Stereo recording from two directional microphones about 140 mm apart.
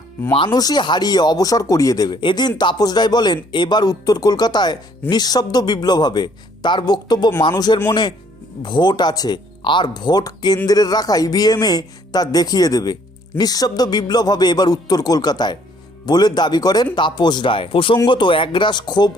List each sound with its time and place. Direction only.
0.3 s a man's voice: 30° left (ahead or behind)